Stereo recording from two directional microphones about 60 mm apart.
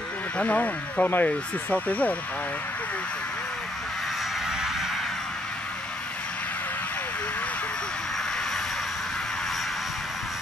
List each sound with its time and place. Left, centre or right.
0.4 s speech: left
4.5 s vehicle: centre